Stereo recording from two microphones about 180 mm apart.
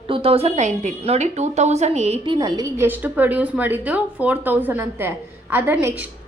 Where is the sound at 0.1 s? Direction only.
30° right (ahead or behind).